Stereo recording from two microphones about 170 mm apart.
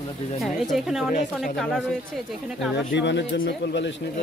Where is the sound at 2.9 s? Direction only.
90° left.